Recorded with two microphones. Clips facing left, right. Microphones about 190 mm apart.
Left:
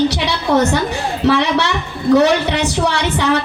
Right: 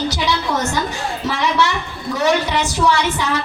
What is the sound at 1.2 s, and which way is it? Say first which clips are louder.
Child singing: left 4 dB; 65° left (ahead or behind).